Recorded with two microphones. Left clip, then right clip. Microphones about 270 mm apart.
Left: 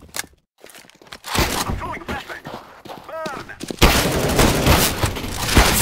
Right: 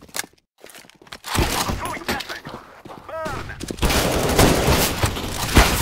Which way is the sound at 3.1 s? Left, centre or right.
Centre.